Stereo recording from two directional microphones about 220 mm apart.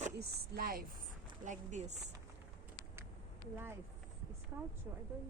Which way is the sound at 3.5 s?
10° right (ahead or behind).